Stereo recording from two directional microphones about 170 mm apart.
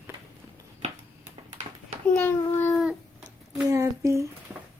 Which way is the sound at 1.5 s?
40° right (ahead or behind).